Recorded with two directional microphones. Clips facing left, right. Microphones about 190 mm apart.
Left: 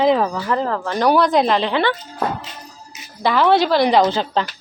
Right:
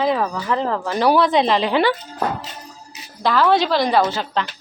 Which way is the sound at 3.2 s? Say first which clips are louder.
Left 1 dB; 10° left (ahead or behind).